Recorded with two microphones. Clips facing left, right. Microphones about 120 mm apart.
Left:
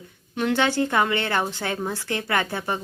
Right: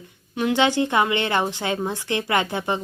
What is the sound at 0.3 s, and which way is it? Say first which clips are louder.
A woman's voice: right 2 dB; 15° right (ahead or behind).